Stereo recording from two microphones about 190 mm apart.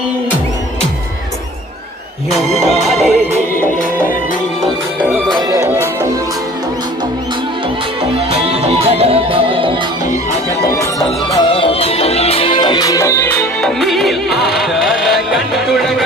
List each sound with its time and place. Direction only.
2.3 s music: centre (ahead or behind)
3.5 s music: 45° left (ahead or behind)
4.6 s music: 10° right (ahead or behind)
8.3 s music: 35° right (ahead or behind)
11.0 s music: 30° left (ahead or behind)
13.6 s music: centre (ahead or behind)